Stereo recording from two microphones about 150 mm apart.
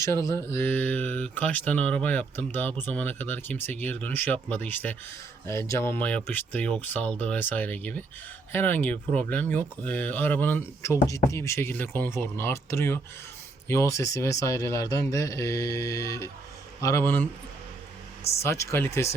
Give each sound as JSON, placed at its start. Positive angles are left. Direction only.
{"t": 0.0, "sound": "speech", "side_deg": 20}
{"t": 18.4, "sound": "speech", "side_deg": 20}